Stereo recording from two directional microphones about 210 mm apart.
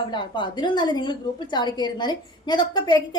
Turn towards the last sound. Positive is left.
turn(degrees=20)  # may be behind; listen again after turning